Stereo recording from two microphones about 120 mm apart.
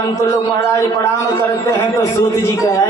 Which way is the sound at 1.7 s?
25° left (ahead or behind).